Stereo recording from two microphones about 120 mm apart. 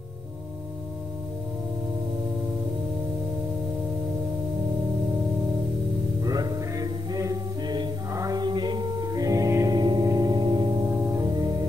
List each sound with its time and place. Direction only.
6.2 s music: 30° right (ahead or behind)
10.9 s music: 20° right (ahead or behind)